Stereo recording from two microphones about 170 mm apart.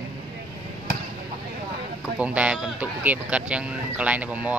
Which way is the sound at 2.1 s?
5° right (ahead or behind).